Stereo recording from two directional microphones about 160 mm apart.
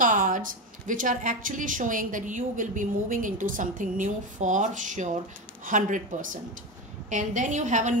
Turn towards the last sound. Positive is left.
turn(degrees=-50)  # may be behind; listen again after turning